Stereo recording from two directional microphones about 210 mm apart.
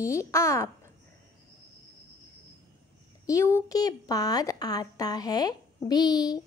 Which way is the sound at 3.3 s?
15° left (ahead or behind).